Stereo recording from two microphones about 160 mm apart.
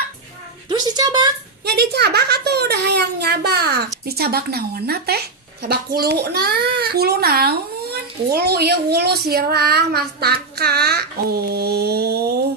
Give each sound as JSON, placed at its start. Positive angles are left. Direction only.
{"t": 0.9, "sound": "a woman's voice", "side_deg": -25}
{"t": 1.6, "sound": "a child's voice", "side_deg": -90}
{"t": 4.0, "sound": "a child's voice", "side_deg": -80}